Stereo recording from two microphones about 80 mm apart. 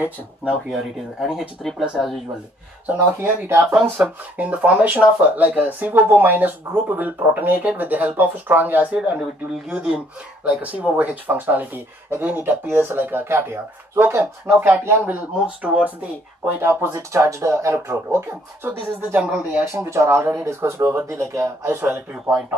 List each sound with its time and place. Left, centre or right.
0.5 s speech: centre
2.9 s speech: right
4.0 s speech: centre; by 15.1 s right
15.1 s speech: centre
16.6 s speech: right
19.2 s speech: centre
19.7 s speech: right